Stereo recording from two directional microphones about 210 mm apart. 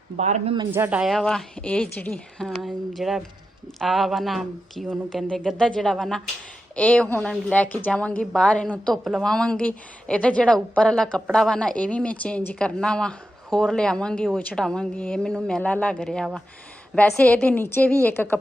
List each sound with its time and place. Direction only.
0.2 s speech: 30° right (ahead or behind)
0.7 s a woman's voice: 10° right (ahead or behind); by 18.1 s 10° left (ahead or behind)